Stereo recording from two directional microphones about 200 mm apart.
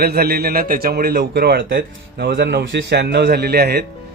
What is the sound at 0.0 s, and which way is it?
A man's voice, 50° right (ahead or behind).